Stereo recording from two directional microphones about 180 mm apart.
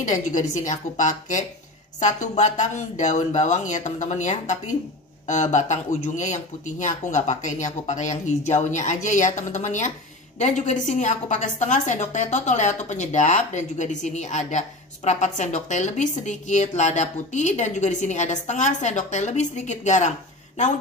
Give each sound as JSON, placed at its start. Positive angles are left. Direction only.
{"t": 0.0, "sound": "a woman's voice", "side_deg": 45}